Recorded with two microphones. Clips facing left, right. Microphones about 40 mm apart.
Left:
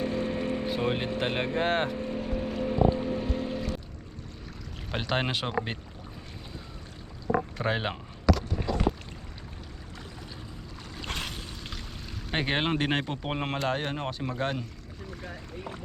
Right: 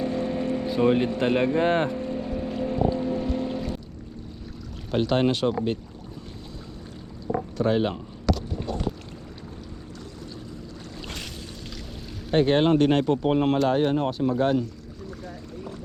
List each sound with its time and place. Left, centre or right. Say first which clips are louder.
0.0 s a sound: right 3 dB; left
0.3 s a sound: right 3 dB; centre
0.8 s speech: right 11 dB; centre
1.0 s speech: right 7 dB; left
1.8 s music: right 3 dB; left
3.1 s music: right 4 dB; left
3.4 s music: right 3 dB; centre
4.9 s speech: right 7 dB; centre
7.6 s speech: right 6 dB; centre
12.3 s speech: right 8 dB; centre